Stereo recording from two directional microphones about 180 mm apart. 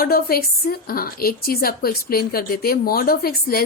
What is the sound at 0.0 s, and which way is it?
A woman's voice, 55° left (ahead or behind).